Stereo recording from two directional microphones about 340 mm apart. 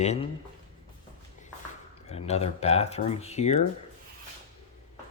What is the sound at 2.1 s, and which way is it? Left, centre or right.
Speech, centre.